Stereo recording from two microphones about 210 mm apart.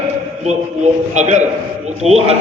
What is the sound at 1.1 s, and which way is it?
A man's voice, 35° right (ahead or behind).